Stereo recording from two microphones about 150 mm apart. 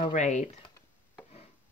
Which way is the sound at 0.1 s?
55° left (ahead or behind).